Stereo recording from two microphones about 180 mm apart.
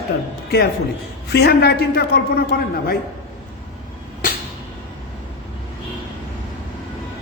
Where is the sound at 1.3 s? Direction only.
65° left (ahead or behind).